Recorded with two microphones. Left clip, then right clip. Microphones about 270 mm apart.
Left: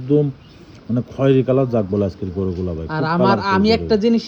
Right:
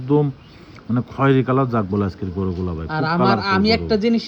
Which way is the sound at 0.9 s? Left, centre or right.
Centre.